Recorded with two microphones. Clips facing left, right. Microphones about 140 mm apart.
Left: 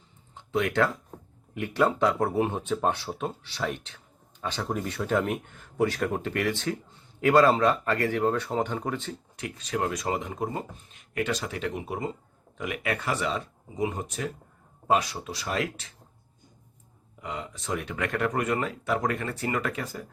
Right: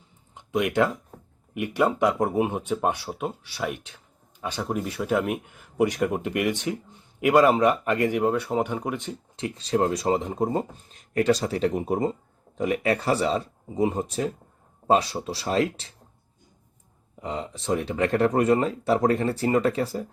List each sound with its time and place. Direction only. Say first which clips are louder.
0.3 s speech: right 2 dB; 15° right (ahead or behind)
9.3 s speech: right 7 dB; 30° right (ahead or behind)
17.2 s speech: right 5 dB; 30° right (ahead or behind)